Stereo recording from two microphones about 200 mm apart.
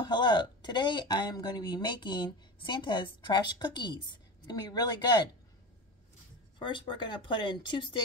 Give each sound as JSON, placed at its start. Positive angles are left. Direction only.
{"t": 0.0, "sound": "speech", "side_deg": 20}
{"t": 6.6, "sound": "speech", "side_deg": 25}